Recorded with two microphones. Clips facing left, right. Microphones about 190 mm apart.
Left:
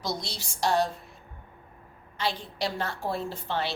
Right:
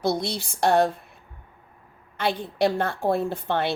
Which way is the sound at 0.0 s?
55° right (ahead or behind).